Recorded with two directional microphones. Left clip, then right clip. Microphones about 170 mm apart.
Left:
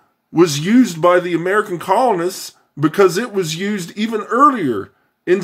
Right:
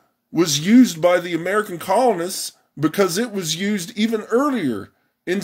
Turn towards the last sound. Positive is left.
turn(degrees=-30)  # may be behind; listen again after turning